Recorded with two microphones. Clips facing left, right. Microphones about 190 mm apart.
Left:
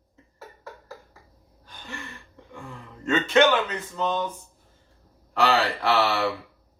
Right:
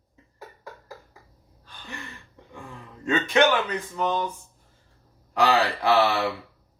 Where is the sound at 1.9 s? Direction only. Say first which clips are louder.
Left 1 dB; 15° right (ahead or behind).